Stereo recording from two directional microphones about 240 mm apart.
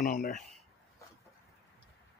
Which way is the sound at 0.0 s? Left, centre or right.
Left.